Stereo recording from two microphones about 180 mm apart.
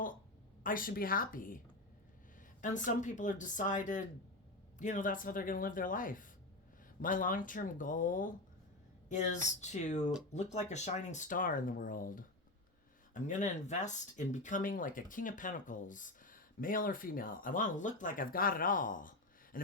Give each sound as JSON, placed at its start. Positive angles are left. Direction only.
{"t": 0.6, "sound": "a woman's voice", "side_deg": 50}